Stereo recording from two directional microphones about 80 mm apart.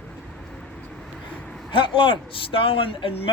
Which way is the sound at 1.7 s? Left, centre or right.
Left.